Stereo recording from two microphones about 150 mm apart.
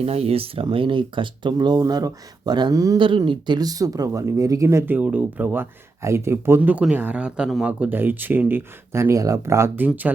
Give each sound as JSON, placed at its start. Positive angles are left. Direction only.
{"t": 0.0, "sound": "speech", "side_deg": -40}